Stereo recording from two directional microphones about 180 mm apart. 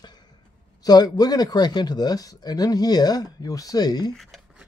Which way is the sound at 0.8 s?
20° left (ahead or behind).